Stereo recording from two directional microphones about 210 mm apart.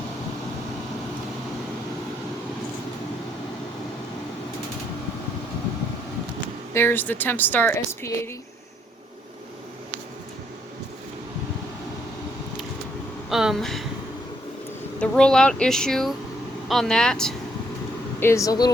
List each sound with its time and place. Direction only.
6.7 s speech: 10° left (ahead or behind)
13.3 s speech: centre (ahead or behind)
14.9 s speech: 5° left (ahead or behind)
18.2 s speech: 15° left (ahead or behind)